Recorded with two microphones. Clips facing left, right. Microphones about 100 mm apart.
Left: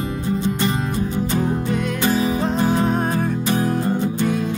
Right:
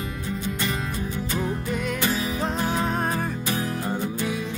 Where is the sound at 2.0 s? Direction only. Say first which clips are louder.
Left 10 dB; 40° left (ahead or behind).